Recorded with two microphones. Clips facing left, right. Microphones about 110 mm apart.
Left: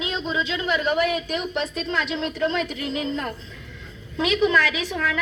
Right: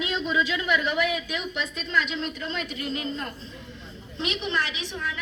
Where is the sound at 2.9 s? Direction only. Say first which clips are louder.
Left 4 dB; 90° left.